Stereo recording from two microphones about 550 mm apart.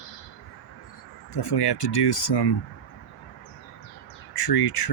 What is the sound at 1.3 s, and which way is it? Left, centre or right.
Speech, left.